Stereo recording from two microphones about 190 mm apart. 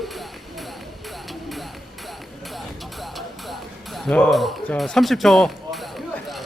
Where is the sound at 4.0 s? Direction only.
5° left (ahead or behind).